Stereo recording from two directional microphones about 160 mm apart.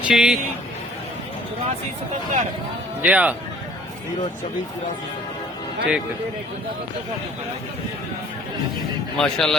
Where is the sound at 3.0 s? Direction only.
10° right (ahead or behind).